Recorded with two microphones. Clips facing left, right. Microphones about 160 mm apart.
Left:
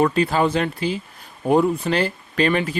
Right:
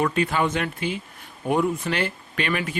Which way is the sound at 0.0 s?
35° left (ahead or behind).